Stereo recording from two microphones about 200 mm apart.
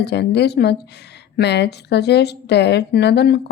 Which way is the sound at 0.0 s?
55° left (ahead or behind).